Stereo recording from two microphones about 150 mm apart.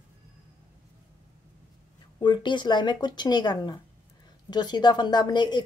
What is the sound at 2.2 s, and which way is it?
A woman's voice, 30° left (ahead or behind).